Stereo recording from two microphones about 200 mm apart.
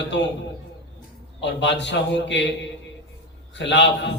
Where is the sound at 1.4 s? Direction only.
60° left (ahead or behind).